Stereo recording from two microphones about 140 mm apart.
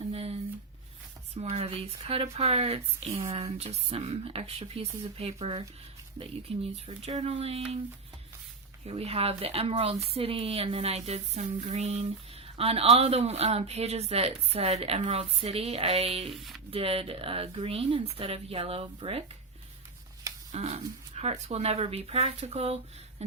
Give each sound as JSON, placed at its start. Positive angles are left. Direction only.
{"t": 0.1, "sound": "a sound", "side_deg": -45}
{"t": 1.3, "sound": "speech", "side_deg": -45}
{"t": 8.9, "sound": "speech", "side_deg": -45}
{"t": 20.5, "sound": "speech", "side_deg": -50}